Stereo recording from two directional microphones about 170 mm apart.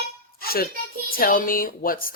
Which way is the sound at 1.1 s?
55° left (ahead or behind).